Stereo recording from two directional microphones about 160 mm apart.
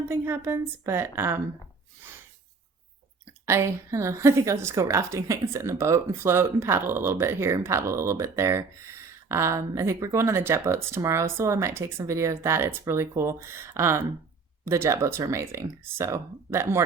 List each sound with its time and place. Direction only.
0.1 s a woman's voice: 15° right (ahead or behind)
3.4 s a woman's voice: 15° right (ahead or behind)